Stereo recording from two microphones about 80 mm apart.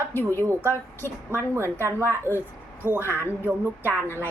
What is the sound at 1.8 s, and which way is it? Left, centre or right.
Speech, right.